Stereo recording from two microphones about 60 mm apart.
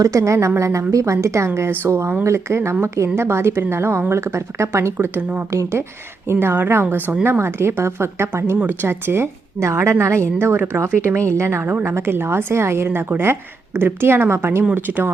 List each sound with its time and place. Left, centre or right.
0.0 s a woman's voice: right
4.9 s a woman's voice: right
5.5 s a woman's voice: right
6.2 s a woman's voice: right
8.5 s speech: right
8.9 s a woman's voice: right
10.6 s a woman's voice: right
11.7 s a woman's voice: right
14.8 s a woman's voice: right